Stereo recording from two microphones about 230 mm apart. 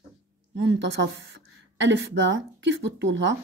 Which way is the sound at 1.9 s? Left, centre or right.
Right.